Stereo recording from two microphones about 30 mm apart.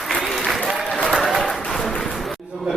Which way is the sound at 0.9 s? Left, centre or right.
Left.